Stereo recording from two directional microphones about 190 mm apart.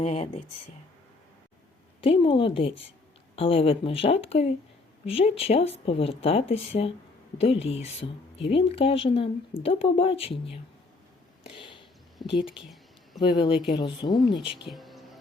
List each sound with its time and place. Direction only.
0.0 s speech: 30° left (ahead or behind)
2.0 s speech: 25° left (ahead or behind)
11.5 s whispering: 25° left (ahead or behind)
13.1 s speech: 20° left (ahead or behind)
14.7 s music: centre (ahead or behind)